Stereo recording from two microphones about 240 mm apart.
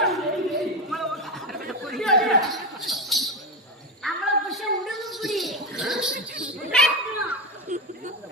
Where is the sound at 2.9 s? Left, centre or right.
Centre.